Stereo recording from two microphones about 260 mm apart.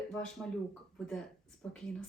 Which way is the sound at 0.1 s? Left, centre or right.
Centre.